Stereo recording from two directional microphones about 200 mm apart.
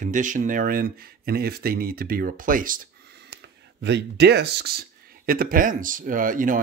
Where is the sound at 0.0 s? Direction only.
40° right (ahead or behind).